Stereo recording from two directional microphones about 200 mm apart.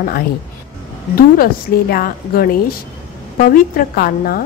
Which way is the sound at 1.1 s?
50° left (ahead or behind).